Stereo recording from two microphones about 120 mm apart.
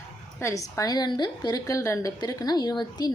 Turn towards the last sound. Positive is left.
turn(degrees=35)  # may be behind; listen again after turning